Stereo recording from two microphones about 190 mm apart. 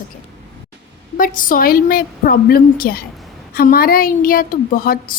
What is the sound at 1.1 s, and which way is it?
A woman's voice, 45° left (ahead or behind).